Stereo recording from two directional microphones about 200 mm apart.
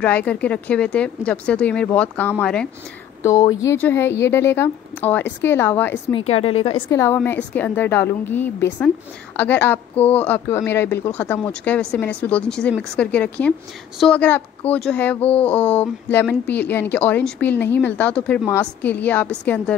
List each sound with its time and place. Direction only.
0.0 s speech: 5° left (ahead or behind)
3.2 s speech: 15° left (ahead or behind)
6.1 s a woman's voice: 30° left (ahead or behind)
6.9 s speech: 15° left (ahead or behind)